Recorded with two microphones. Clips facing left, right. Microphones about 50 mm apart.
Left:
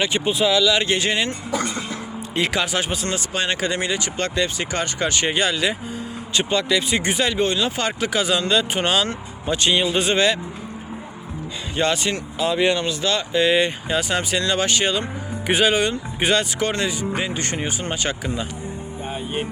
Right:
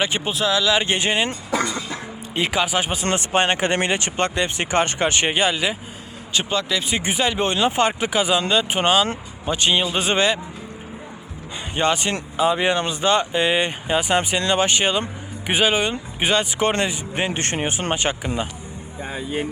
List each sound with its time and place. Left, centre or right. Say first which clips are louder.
0.3 s speech: left 3 dB; centre
0.6 s speech: left 1 dB; centre
0.9 s speech: even; right
2.3 s speech: right 1 dB; centre
3.1 s speech: right 4 dB; right
4.2 s speech: even; right
5.3 s speech: even; centre
6.3 s speech: left 2 dB; centre
7.4 s speech: right 3 dB; right
11.8 s speech: right 1 dB; centre
15.4 s speech: left 1 dB; centre
16.6 s speech: right 2 dB; right
17.2 s speech: right 1 dB; right